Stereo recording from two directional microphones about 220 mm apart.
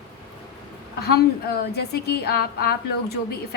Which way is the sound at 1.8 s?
45° left (ahead or behind).